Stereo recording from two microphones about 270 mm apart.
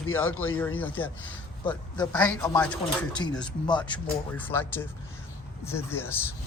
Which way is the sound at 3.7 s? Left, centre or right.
Centre.